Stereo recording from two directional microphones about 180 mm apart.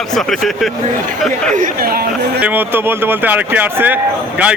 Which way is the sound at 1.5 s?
45° right (ahead or behind).